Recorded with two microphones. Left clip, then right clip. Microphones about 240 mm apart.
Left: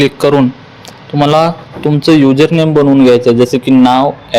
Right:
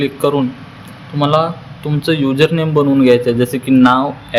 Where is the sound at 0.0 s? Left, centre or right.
Left.